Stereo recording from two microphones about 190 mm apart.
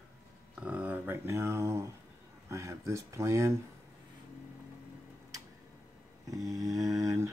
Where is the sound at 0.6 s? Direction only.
5° right (ahead or behind).